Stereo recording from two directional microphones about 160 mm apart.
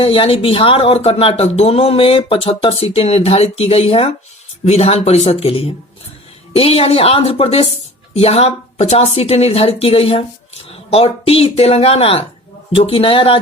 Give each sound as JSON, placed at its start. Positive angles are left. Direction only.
{"t": 0.0, "sound": "speech", "side_deg": 35}